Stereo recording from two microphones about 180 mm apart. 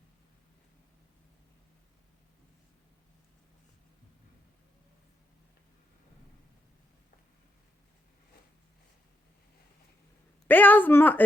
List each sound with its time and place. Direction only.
10.4 s speech: 10° left (ahead or behind)